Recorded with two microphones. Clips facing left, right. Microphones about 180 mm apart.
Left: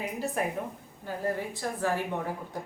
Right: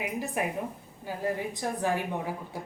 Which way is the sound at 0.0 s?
15° right (ahead or behind).